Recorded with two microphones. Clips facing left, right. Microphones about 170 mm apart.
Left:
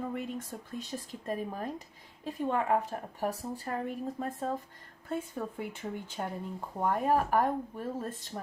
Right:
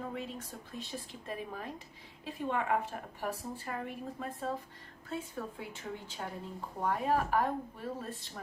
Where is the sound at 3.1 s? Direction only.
40° left (ahead or behind).